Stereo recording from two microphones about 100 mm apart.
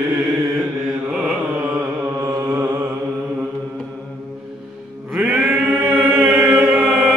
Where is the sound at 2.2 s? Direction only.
35° right (ahead or behind).